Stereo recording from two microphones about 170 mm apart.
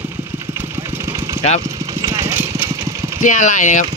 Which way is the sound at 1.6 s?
20° right (ahead or behind).